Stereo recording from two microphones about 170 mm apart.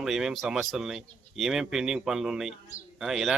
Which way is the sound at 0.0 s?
Centre (ahead or behind).